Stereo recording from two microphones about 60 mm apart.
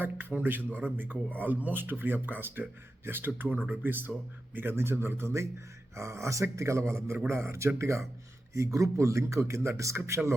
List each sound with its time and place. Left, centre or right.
0.0 s a man's voice: right